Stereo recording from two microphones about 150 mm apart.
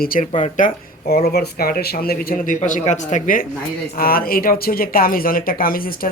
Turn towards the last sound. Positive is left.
turn(degrees=75)  # may be behind; listen again after turning